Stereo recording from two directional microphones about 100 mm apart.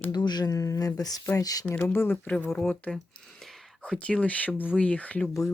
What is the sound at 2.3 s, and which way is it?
Speech, 5° left (ahead or behind).